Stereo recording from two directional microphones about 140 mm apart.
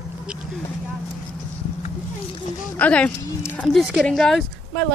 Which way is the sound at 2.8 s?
10° left (ahead or behind).